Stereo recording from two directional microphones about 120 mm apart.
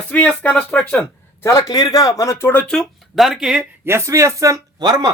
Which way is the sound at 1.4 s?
30° left (ahead or behind).